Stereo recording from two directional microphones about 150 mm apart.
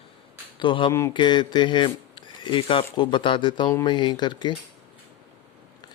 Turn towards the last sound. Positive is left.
turn(degrees=30)  # may be behind; listen again after turning